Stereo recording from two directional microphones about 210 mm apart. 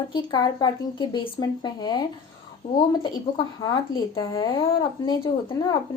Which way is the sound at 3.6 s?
20° left (ahead or behind).